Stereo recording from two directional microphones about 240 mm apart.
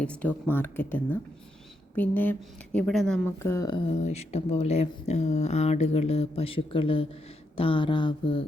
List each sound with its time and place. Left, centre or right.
0.0 s speech: centre; by 8.4 s left